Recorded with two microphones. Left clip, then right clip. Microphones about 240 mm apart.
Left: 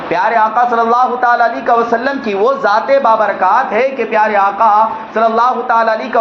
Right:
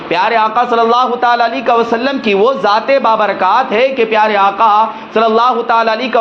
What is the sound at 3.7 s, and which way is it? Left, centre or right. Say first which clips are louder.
A man's voice: right 2 dB; right.